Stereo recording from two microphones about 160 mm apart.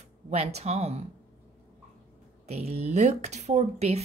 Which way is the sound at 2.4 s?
40° right (ahead or behind).